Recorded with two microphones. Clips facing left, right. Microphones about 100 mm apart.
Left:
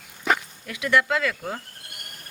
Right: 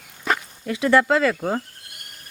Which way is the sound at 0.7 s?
30° right (ahead or behind).